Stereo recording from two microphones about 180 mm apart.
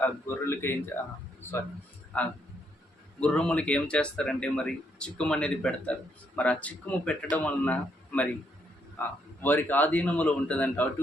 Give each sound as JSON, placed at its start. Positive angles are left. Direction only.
{"t": 0.0, "sound": "speech", "side_deg": 10}